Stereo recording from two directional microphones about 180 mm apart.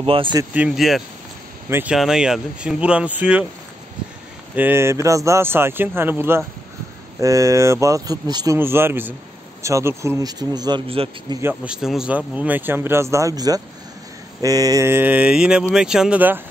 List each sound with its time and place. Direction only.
0.0 s speech: 30° right (ahead or behind)
0.4 s speech: 10° right (ahead or behind)
4.6 s speech: 10° right (ahead or behind); by 11.3 s 25° right (ahead or behind)
11.4 s speech: 5° right (ahead or behind)